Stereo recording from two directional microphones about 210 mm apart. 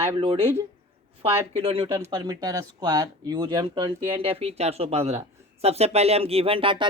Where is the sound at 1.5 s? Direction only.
25° right (ahead or behind).